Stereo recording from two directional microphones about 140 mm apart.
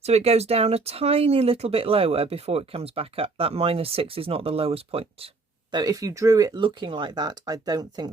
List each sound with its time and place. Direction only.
0.0 s speech: 50° right (ahead or behind)
5.7 s speech: 25° right (ahead or behind)